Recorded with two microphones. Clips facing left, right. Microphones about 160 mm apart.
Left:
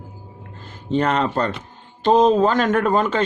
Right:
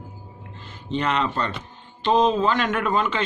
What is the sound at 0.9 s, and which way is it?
Speech, 45° left (ahead or behind).